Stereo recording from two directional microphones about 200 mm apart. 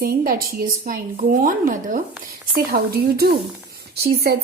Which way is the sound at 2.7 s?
50° right (ahead or behind).